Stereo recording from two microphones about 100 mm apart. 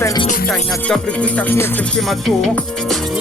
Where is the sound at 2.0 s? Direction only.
Centre (ahead or behind).